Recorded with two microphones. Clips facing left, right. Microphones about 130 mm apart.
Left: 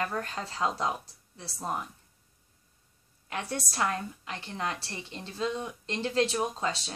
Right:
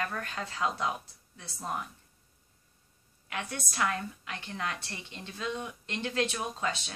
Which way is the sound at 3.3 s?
35° left (ahead or behind).